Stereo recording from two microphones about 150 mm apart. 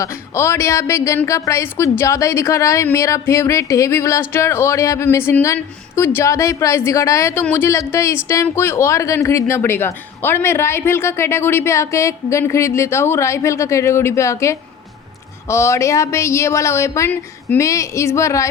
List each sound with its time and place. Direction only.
0.0 s a woman's voice: 20° left (ahead or behind)